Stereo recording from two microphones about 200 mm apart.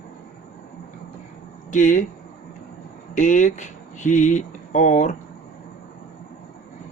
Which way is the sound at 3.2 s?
40° left (ahead or behind).